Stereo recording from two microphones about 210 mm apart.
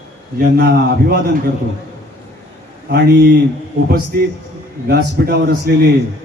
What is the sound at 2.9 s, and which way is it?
Speech, 50° right (ahead or behind).